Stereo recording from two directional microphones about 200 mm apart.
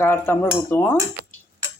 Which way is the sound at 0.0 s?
10° left (ahead or behind).